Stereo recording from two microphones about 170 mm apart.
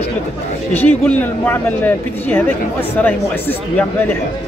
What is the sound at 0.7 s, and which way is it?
Speech, 10° left (ahead or behind).